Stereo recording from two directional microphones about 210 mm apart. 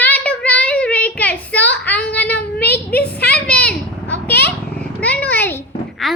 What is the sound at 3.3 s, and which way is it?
A child's voice, 5° left (ahead or behind).